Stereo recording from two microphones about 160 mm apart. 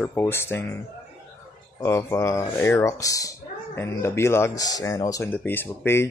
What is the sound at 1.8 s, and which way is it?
Speech, 15° left (ahead or behind).